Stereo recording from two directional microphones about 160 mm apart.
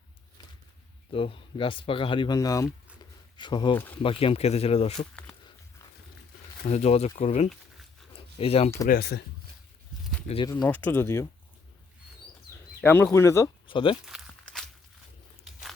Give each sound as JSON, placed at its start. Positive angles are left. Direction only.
{"t": 1.1, "sound": "speech", "side_deg": 35}
{"t": 3.8, "sound": "speech", "side_deg": 10}
{"t": 4.0, "sound": "speech", "side_deg": 35}
{"t": 6.7, "sound": "speech", "side_deg": 40}
{"t": 8.9, "sound": "speech", "side_deg": 80}
{"t": 10.4, "sound": "speech", "side_deg": 25}
{"t": 10.7, "sound": "speech", "side_deg": 10}
{"t": 12.8, "sound": "speech", "side_deg": 10}
{"t": 13.7, "sound": "speech", "side_deg": 30}
{"t": 14.0, "sound": "a sound", "side_deg": -5}